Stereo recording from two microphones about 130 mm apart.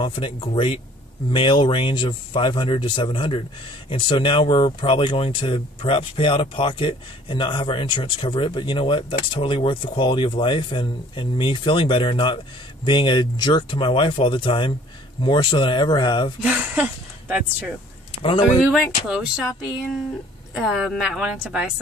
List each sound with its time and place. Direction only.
0.0 s speech: 40° left (ahead or behind)
16.4 s speech: 15° right (ahead or behind)
18.2 s speech: 45° left (ahead or behind)
18.7 s a woman's voice: 5° right (ahead or behind)
20.5 s a woman's voice: 5° right (ahead or behind)